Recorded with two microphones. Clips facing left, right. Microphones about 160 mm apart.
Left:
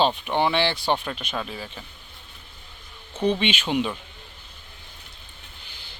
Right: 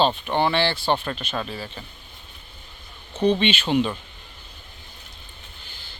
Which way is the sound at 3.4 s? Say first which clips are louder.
Right 3 dB; 10° left (ahead or behind).